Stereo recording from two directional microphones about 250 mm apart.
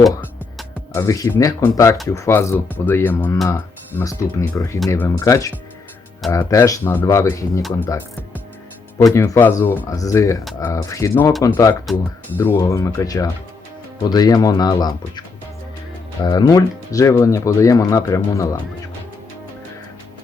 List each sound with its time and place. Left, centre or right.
0.9 s speech: centre
16.2 s speech: centre